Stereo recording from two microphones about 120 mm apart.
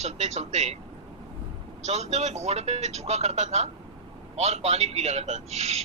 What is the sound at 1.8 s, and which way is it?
Speech, 65° right (ahead or behind).